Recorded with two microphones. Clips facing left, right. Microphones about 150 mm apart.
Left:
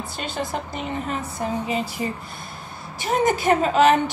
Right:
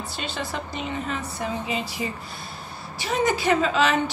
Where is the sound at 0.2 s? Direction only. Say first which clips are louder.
Left 3 dB; 50° left (ahead or behind).